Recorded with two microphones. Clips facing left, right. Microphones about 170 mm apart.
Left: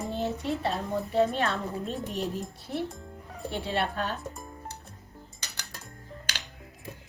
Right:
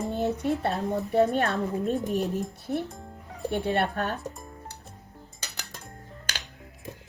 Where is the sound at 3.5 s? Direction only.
60° right (ahead or behind).